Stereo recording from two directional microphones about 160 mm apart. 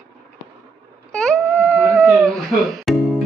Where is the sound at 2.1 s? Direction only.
20° right (ahead or behind).